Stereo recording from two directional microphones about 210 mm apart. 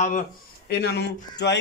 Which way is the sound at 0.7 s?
50° left (ahead or behind).